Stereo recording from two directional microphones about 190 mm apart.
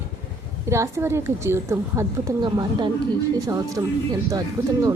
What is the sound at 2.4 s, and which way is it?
Speech, 25° right (ahead or behind).